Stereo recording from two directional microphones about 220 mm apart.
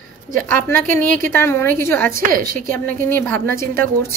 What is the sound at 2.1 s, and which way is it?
Speech, 40° right (ahead or behind).